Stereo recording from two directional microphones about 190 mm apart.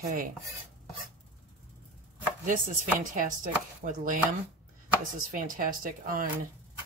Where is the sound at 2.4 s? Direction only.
45° right (ahead or behind).